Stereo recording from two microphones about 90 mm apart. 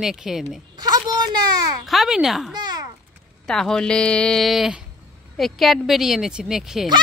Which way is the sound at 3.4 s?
5° left (ahead or behind).